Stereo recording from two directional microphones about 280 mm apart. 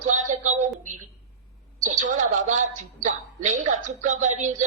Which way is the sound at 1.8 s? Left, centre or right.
Right.